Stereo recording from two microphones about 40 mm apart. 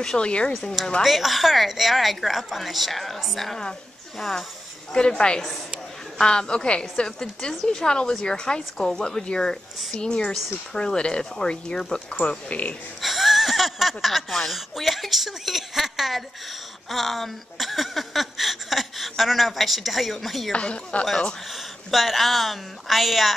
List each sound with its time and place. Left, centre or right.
0.0 s a woman's voice: left
1.0 s a woman's voice: centre
4.9 s a woman's voice: left
12.1 s speech: left
13.0 s a sound: centre
14.5 s a woman's voice: centre
20.5 s a woman's voice: left
21.5 s a woman's voice: centre